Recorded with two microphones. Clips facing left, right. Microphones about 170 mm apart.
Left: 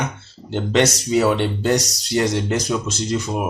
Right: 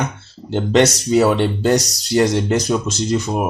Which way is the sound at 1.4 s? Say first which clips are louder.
Right 3 dB; 35° right (ahead or behind).